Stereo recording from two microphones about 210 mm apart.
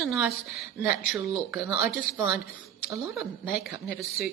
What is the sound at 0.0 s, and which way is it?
Speech, centre (ahead or behind).